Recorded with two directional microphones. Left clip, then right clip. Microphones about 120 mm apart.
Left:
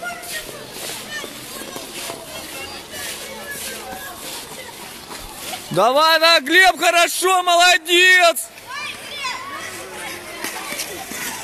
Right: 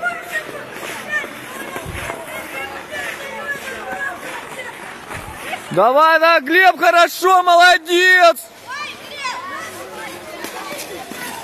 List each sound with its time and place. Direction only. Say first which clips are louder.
5.8 s a man's voice: right 2 dB; 5° left (ahead or behind)
8.7 s children playing: even; 70° left (ahead or behind)